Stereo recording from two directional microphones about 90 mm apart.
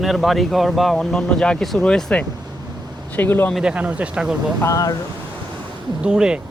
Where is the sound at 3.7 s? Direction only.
15° right (ahead or behind).